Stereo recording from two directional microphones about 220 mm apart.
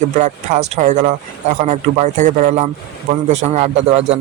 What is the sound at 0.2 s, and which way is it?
A man's voice, 30° right (ahead or behind).